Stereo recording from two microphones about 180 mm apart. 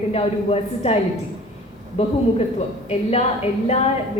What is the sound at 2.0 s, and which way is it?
A woman's voice, 35° left (ahead or behind).